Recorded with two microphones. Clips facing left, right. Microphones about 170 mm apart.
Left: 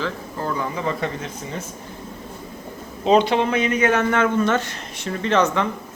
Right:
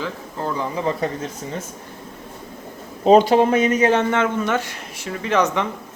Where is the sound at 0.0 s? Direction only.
20° right (ahead or behind).